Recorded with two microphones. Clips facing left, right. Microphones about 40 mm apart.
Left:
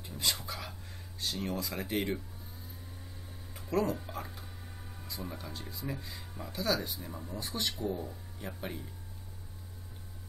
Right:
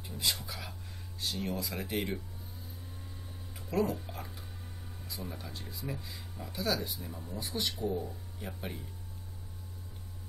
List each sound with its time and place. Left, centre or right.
0.0 s a sound: centre
1.2 s speech: centre
3.5 s speech: centre
5.5 s speech: centre
7.1 s speech: centre
7.3 s speech: centre